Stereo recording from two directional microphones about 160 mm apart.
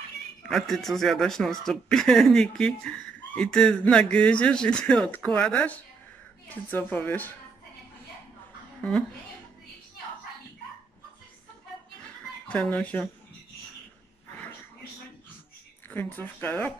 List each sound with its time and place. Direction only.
0.5 s speech: centre (ahead or behind)
12.4 s speech: 10° left (ahead or behind)
15.9 s speech: 10° left (ahead or behind)